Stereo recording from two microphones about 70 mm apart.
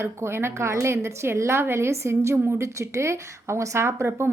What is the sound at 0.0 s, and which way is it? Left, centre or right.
Speech, right.